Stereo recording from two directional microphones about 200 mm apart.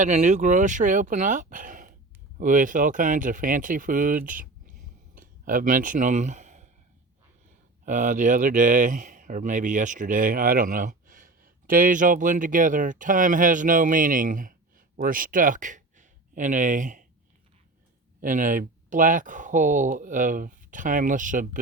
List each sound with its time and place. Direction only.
0.0 s speech: 35° right (ahead or behind)
5.1 s a sound: 40° right (ahead or behind)
7.9 s speech: 40° right (ahead or behind)
18.2 s speech: 40° right (ahead or behind)